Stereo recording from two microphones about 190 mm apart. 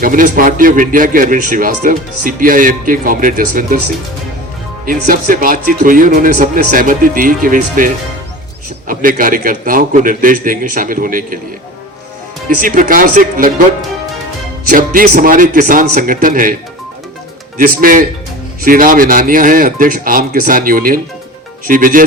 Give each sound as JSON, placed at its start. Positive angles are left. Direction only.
{"t": 0.0, "sound": "speech", "side_deg": -45}
{"t": 4.9, "sound": "speech", "side_deg": -50}
{"t": 12.5, "sound": "speech", "side_deg": -45}
{"t": 14.7, "sound": "speech", "side_deg": -50}
{"t": 17.6, "sound": "speech", "side_deg": -45}